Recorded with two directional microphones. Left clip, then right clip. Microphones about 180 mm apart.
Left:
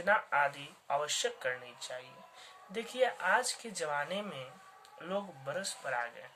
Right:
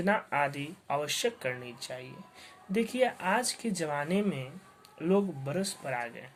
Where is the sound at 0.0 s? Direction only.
30° right (ahead or behind).